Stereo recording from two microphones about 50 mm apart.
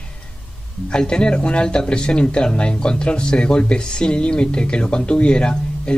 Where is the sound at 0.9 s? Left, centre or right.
Centre.